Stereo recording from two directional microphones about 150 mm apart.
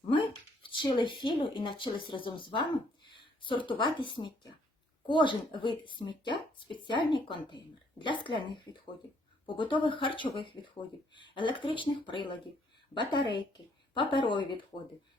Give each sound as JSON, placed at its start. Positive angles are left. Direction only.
{"t": 0.1, "sound": "speech", "side_deg": 35}